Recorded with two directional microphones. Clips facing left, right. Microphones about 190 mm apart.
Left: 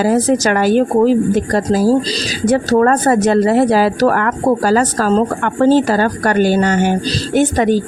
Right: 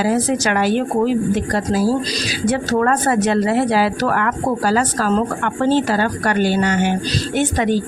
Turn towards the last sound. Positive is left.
turn(degrees=45)  # may be behind; listen again after turning